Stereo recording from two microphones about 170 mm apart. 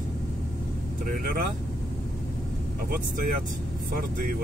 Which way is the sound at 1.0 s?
55° right (ahead or behind).